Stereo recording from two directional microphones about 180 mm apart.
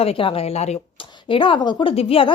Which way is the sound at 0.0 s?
30° left (ahead or behind).